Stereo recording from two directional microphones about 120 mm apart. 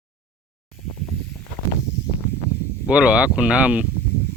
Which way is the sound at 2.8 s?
10° right (ahead or behind).